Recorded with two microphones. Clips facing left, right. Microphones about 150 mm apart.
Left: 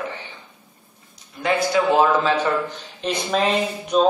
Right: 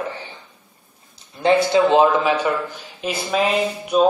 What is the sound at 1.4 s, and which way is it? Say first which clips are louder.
A man's voice: right 4 dB; 25° right (ahead or behind).